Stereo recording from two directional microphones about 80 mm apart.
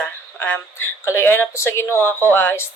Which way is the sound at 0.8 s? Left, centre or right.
Left.